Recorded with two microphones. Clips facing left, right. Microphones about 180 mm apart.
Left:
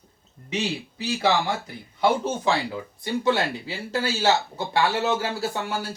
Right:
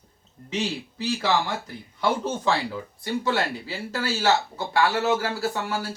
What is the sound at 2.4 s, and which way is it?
Speech, 20° left (ahead or behind).